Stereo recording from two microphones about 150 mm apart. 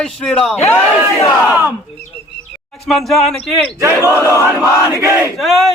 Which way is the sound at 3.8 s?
15° right (ahead or behind).